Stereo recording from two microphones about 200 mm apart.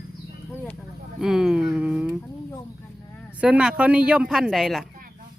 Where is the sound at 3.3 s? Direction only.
5° right (ahead or behind).